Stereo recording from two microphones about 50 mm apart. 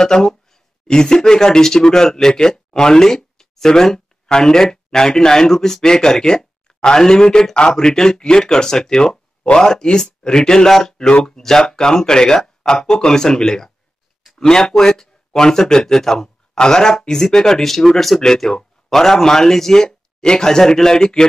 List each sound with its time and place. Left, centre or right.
0.0 s speech: centre